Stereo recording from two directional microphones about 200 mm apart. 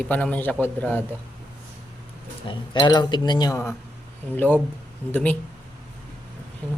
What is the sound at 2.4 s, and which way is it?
Speech, 20° left (ahead or behind).